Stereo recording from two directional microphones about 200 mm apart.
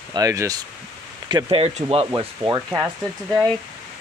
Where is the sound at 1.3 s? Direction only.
30° right (ahead or behind).